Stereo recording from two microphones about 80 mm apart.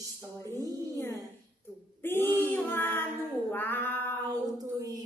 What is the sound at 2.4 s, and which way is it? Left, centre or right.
Female singing, left.